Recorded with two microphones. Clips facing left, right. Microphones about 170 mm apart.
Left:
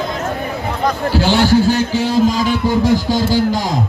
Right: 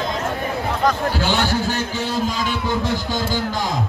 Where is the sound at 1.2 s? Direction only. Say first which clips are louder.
Left 6 dB; 40° left (ahead or behind).